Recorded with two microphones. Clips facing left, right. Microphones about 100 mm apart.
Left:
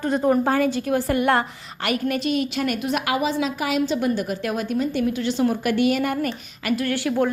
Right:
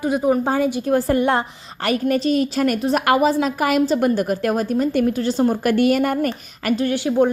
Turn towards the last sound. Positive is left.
turn(degrees=-20)  # may be behind; listen again after turning